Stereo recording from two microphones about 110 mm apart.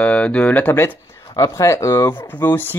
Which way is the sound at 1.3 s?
30° left (ahead or behind).